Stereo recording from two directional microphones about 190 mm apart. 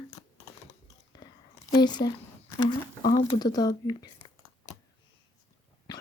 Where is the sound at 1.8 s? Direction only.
20° left (ahead or behind).